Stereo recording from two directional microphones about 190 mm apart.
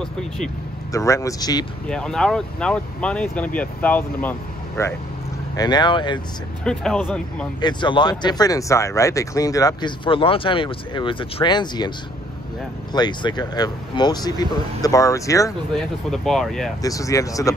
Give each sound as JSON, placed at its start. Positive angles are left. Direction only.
{"t": 0.0, "sound": "speech", "side_deg": 5}
{"t": 0.9, "sound": "speech", "side_deg": 15}
{"t": 1.9, "sound": "speech", "side_deg": 5}
{"t": 5.6, "sound": "speech", "side_deg": 25}
{"t": 6.6, "sound": "speech", "side_deg": 5}
{"t": 7.6, "sound": "speech", "side_deg": 25}
{"t": 12.9, "sound": "speech", "side_deg": 20}
{"t": 15.7, "sound": "speech", "side_deg": 0}
{"t": 16.8, "sound": "speech", "side_deg": 15}